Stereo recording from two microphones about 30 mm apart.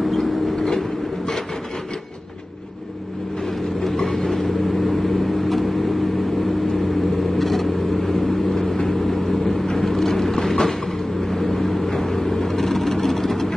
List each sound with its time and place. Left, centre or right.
0.0 s train: centre
3.4 s vehicle: centre
7.3 s vehicle: centre